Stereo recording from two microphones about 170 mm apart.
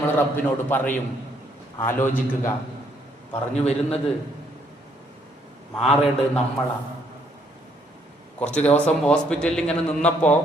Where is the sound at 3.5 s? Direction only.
40° left (ahead or behind).